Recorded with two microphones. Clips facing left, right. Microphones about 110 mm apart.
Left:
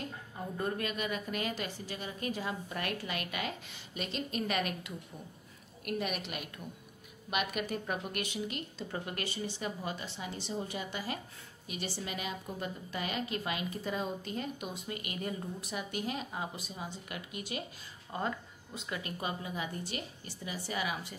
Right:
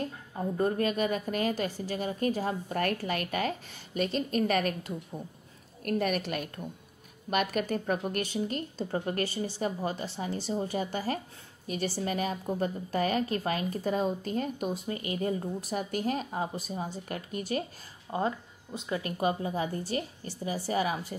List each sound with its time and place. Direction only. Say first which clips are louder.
0.6 s a woman's voice: right 8 dB; 40° right (ahead or behind)
18.1 s speech: right 6 dB; 20° right (ahead or behind)
18.9 s speech: right 8 dB; 30° right (ahead or behind)